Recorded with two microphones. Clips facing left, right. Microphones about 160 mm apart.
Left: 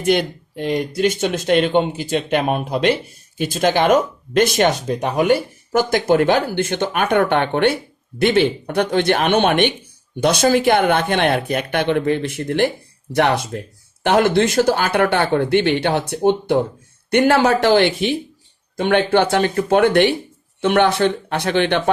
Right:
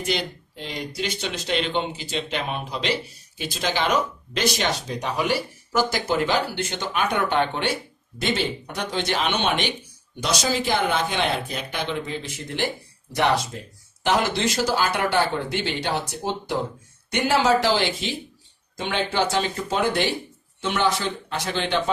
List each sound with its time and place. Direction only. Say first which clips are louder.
0.0 s speech: left 9 dB; 55° left (ahead or behind)